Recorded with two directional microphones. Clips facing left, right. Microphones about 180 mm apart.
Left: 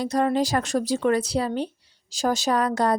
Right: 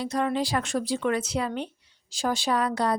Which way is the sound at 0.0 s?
40° left (ahead or behind).